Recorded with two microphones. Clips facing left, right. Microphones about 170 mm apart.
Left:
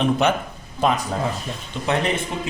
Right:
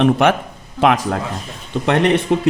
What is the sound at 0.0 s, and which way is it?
Speech, 85° right.